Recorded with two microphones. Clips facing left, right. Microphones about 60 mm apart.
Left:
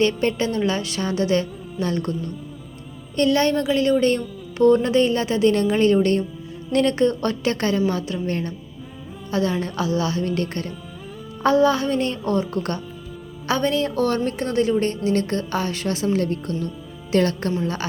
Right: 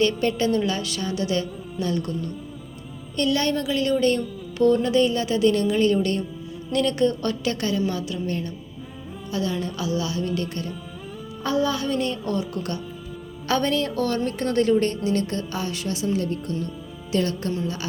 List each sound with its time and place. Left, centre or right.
0.2 s a woman's voice: left
3.2 s a woman's voice: left
11.4 s a woman's voice: left
13.5 s a woman's voice: centre
13.9 s a woman's voice: left
14.3 s a woman's voice: centre
15.1 s a woman's voice: left
17.6 s a woman's voice: left